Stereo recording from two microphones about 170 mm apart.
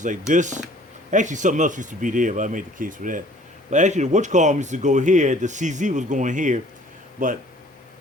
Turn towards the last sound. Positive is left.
turn(degrees=-50)  # may be behind; listen again after turning